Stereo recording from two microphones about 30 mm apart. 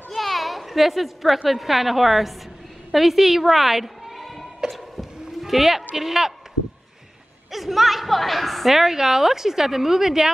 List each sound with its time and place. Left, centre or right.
0.1 s a sound: centre
1.5 s a woman's voice: centre
4.6 s a sound: centre
5.9 s a woman's voice: centre
7.5 s a woman's voice: centre
8.7 s a woman's voice: centre